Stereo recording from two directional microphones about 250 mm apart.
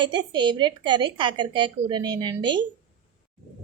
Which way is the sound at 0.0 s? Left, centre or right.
Centre.